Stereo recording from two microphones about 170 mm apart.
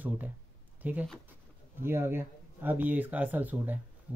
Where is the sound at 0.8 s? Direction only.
10° right (ahead or behind).